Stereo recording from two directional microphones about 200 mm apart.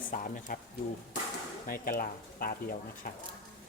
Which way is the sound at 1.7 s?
45° left (ahead or behind).